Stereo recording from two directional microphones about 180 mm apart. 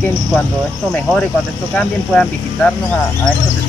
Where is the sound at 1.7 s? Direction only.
5° left (ahead or behind).